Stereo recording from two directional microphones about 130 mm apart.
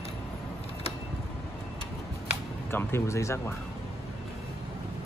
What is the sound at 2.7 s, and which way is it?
Speech, 20° left (ahead or behind).